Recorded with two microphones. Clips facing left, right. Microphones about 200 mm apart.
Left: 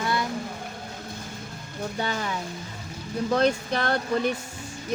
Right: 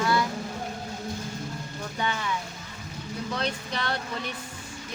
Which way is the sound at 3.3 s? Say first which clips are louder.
Left 9 dB; 45° left (ahead or behind).